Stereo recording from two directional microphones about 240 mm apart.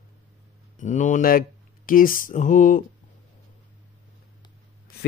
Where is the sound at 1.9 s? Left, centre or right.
Left.